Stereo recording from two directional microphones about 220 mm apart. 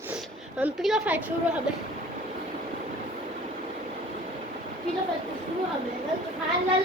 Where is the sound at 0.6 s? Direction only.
Centre (ahead or behind).